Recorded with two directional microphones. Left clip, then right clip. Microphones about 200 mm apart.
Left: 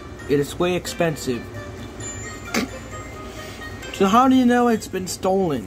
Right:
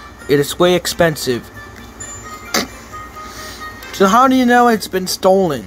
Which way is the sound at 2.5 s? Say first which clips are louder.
Right 6 dB; 20° right (ahead or behind).